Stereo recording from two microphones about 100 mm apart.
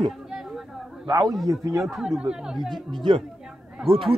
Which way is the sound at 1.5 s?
30° right (ahead or behind).